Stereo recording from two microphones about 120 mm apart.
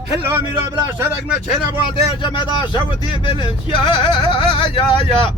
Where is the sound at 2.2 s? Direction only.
40° left (ahead or behind).